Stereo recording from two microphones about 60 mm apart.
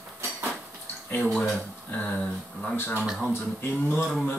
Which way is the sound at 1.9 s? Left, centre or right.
Left.